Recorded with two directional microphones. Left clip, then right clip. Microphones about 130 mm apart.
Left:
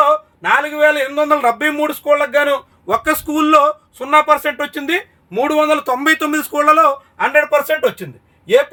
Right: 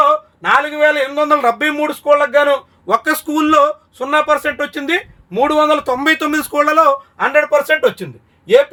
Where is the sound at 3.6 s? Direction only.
40° right (ahead or behind).